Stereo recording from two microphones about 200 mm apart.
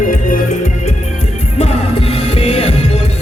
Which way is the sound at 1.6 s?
30° left (ahead or behind).